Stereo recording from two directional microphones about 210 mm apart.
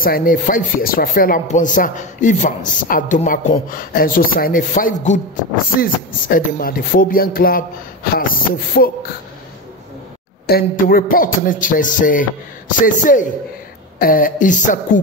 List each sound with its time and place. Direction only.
0.0 s speech: 45° left (ahead or behind)
5.8 s a sound: 40° left (ahead or behind)
10.5 s speech: 45° left (ahead or behind)